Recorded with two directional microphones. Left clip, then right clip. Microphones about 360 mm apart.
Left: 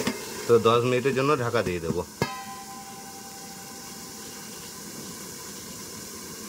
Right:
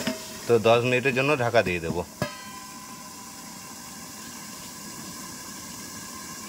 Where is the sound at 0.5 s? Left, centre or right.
Centre.